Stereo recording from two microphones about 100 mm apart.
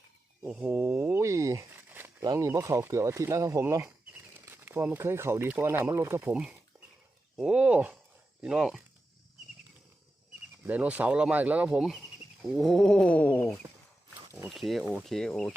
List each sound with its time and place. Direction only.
0.4 s speech: 15° right (ahead or behind); by 1.6 s 30° right (ahead or behind)
1.7 s a sound: 20° right (ahead or behind)
2.2 s speech: 30° right (ahead or behind)
6.3 s a sound: 10° right (ahead or behind)
7.3 s speech: 10° right (ahead or behind)
10.7 s speech: 15° right (ahead or behind); by 13.5 s 20° left (ahead or behind)
14.5 s speech: centre (ahead or behind)